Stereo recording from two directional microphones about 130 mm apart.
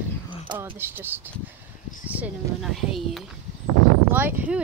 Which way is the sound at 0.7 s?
15° right (ahead or behind).